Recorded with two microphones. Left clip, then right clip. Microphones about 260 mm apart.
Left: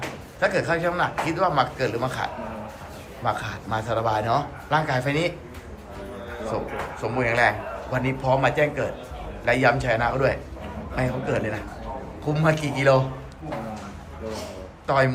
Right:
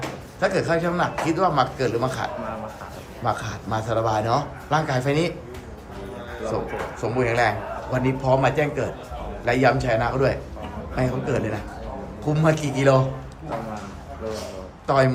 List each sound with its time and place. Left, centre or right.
0.3 s speech: centre
7.0 s speech: centre
14.8 s a man's voice: centre